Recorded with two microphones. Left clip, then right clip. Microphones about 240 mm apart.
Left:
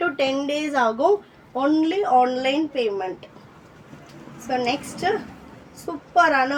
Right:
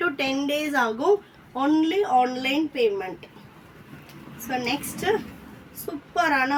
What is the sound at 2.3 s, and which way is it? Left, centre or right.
Speech, centre.